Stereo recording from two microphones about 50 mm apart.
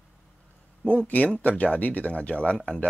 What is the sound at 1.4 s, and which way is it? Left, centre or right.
Speech, left.